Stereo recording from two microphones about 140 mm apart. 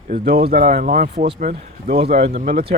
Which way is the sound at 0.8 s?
65° right (ahead or behind).